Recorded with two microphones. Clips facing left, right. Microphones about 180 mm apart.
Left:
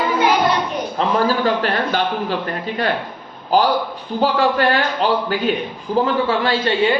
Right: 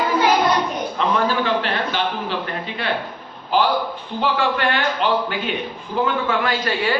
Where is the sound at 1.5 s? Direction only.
45° left (ahead or behind).